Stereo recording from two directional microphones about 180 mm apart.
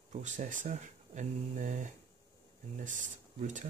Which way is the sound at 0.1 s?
45° right (ahead or behind).